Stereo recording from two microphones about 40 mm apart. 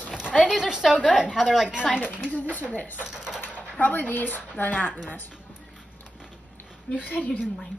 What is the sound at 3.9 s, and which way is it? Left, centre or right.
Speech, left.